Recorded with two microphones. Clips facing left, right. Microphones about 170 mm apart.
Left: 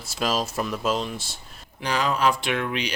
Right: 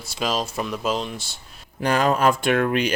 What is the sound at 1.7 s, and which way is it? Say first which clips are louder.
Speech: right 5 dB; 50° right (ahead or behind).